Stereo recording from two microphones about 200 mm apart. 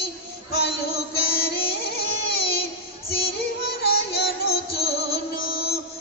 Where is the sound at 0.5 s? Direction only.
50° left (ahead or behind).